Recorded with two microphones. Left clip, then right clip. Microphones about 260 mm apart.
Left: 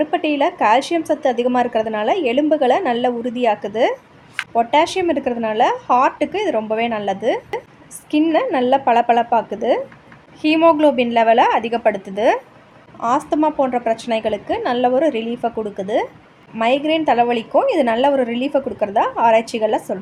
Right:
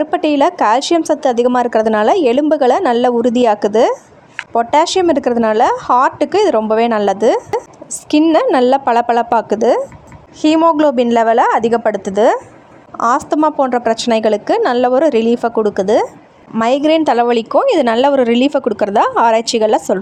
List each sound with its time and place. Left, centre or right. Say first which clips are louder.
0.0 s a woman's voice: right 5 dB; right